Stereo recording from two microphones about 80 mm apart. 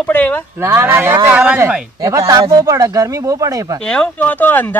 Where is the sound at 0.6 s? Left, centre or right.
Right.